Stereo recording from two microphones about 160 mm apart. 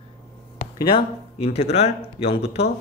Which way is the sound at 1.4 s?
40° left (ahead or behind).